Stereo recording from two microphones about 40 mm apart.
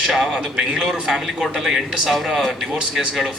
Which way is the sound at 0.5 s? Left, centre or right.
Right.